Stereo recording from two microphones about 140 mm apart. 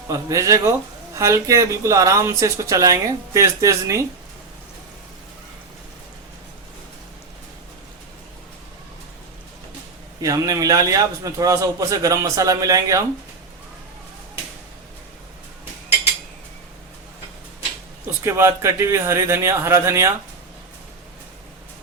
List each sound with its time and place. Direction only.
0.1 s speech: 20° right (ahead or behind)
10.2 s speech: 25° right (ahead or behind)
18.2 s speech: 20° right (ahead or behind)